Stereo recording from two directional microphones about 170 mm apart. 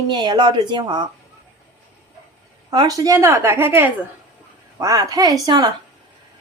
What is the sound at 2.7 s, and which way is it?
Speech, 25° right (ahead or behind).